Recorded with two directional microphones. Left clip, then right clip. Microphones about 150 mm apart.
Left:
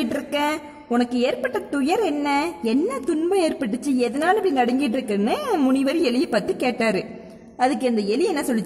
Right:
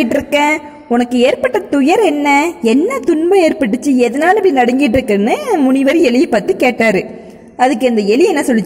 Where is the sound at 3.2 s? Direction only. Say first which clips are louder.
Right 11 dB; 20° right (ahead or behind).